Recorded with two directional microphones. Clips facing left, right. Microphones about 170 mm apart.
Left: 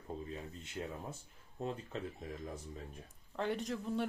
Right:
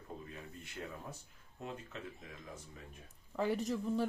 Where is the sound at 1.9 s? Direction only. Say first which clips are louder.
Left 5 dB; 35° left (ahead or behind).